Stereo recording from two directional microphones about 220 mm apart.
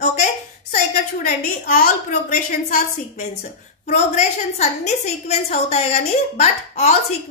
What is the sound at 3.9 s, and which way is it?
A woman's voice, 30° left (ahead or behind).